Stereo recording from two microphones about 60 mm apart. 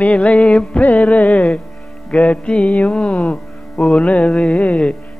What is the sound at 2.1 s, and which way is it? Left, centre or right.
Mantra, left.